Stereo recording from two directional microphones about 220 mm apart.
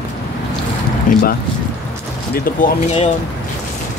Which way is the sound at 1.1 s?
35° left (ahead or behind).